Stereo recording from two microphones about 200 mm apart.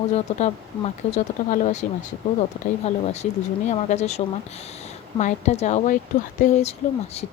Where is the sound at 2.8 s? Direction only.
35° left (ahead or behind).